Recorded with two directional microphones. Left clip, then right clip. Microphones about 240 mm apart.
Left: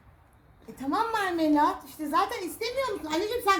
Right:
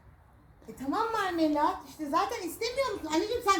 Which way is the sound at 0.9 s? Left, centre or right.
Centre.